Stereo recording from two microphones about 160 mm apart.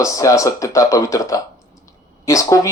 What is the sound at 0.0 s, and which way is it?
A man's voice, 20° left (ahead or behind).